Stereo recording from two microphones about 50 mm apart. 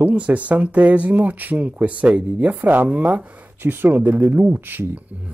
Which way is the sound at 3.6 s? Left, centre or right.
Right.